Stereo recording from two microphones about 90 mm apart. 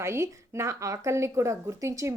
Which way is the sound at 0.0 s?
30° right (ahead or behind).